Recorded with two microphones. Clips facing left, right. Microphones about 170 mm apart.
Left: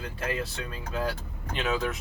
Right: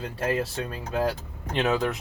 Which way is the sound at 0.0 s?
30° right (ahead or behind).